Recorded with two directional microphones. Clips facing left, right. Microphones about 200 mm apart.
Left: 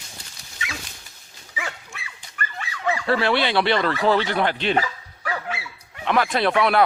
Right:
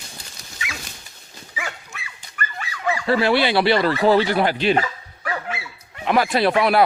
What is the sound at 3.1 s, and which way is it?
Speech, 5° right (ahead or behind).